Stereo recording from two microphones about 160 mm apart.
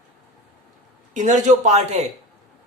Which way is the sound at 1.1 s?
50° right (ahead or behind).